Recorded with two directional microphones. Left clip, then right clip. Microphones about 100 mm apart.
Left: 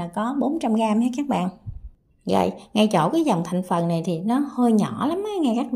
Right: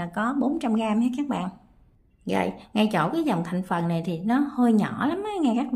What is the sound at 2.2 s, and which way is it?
A woman's voice, 45° left (ahead or behind).